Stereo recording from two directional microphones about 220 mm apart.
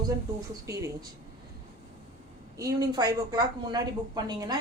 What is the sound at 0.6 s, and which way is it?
Speech, 15° right (ahead or behind).